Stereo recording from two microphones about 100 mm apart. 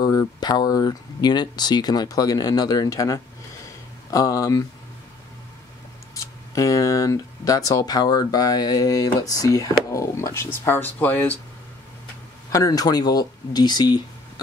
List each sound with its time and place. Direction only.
0.0 s speech: 40° left (ahead or behind)
6.5 s speech: 35° left (ahead or behind); by 11.3 s 15° left (ahead or behind)
12.4 s speech: 35° left (ahead or behind)